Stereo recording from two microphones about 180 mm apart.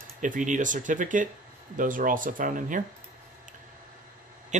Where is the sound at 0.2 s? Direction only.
45° right (ahead or behind).